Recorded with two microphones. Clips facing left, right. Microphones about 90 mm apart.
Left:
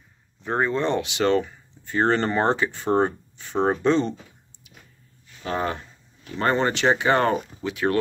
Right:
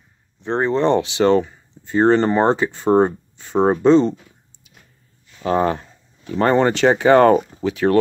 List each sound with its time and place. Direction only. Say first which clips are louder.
0.4 s speech: right 5 dB; 25° right (ahead or behind)
5.4 s speech: right 8 dB; 40° right (ahead or behind)
7.5 s speech: right 7 dB; 30° right (ahead or behind)